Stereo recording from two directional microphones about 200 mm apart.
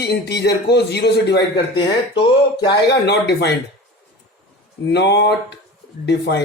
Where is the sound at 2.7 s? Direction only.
55° left (ahead or behind).